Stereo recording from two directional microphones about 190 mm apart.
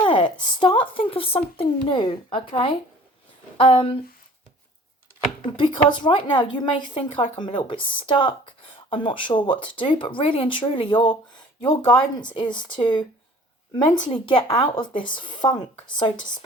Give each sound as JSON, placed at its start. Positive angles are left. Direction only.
{"t": 0.0, "sound": "speech", "side_deg": 25}
{"t": 5.5, "sound": "speech", "side_deg": 25}